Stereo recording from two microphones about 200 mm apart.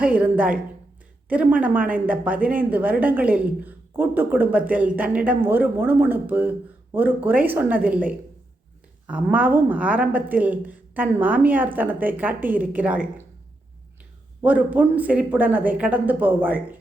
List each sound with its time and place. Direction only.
0.0 s speech: 5° right (ahead or behind)
14.4 s speech: 10° right (ahead or behind)